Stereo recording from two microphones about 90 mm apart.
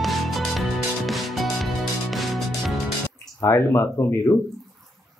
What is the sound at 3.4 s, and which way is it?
Speech, 35° left (ahead or behind).